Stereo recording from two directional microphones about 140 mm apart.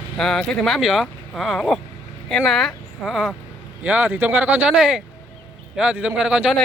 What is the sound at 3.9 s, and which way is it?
Speech, 10° right (ahead or behind).